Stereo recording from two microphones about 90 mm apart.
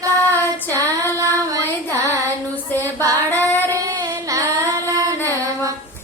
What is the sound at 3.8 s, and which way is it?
Child singing, 40° right (ahead or behind).